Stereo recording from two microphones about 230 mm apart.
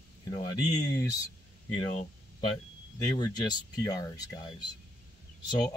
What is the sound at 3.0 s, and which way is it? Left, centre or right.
Speech, centre.